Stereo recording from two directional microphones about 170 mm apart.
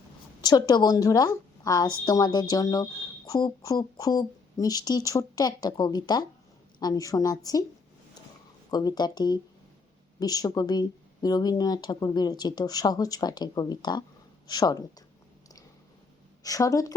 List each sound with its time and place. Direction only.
0.4 s speech: 25° left (ahead or behind)
8.7 s speech: 25° left (ahead or behind)
16.4 s speech: 20° left (ahead or behind)